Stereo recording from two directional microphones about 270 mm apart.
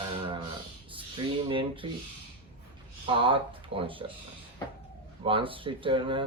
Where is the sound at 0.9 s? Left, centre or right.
Centre.